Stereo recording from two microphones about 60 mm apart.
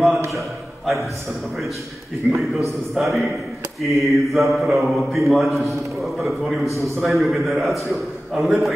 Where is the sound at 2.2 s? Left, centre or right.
Right.